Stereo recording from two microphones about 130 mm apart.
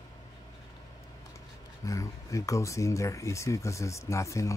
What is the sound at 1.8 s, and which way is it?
Speech, 25° left (ahead or behind).